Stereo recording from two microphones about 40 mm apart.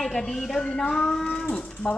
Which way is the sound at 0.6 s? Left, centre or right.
Centre.